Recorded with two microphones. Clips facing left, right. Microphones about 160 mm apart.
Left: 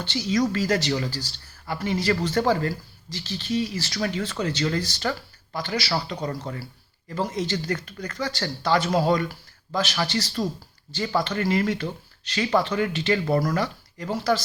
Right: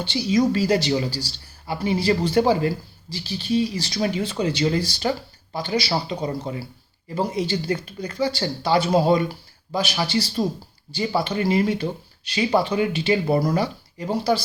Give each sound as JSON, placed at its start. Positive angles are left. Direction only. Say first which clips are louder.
{"t": 0.0, "sound": "speech", "louder": "right 4 dB", "side_deg": -15}
{"t": 5.9, "sound": "speech", "louder": "right 3 dB", "side_deg": -25}
{"t": 6.2, "sound": "speech", "louder": "right 3 dB", "side_deg": -15}